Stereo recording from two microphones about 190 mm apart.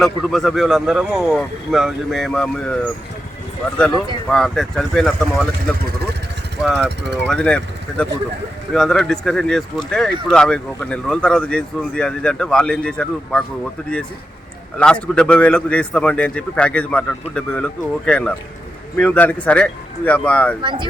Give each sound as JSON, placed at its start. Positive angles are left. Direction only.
{"t": 0.0, "sound": "speech", "side_deg": 0}
{"t": 4.3, "sound": "speech", "side_deg": 0}
{"t": 14.8, "sound": "speech", "side_deg": 5}
{"t": 20.6, "sound": "speech", "side_deg": -25}